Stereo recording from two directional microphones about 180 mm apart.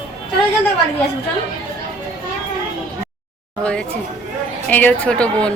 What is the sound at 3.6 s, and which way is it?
A woman's voice, 5° left (ahead or behind).